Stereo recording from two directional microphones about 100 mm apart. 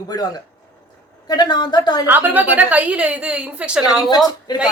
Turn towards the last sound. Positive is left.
turn(degrees=45)  # may be behind; listen again after turning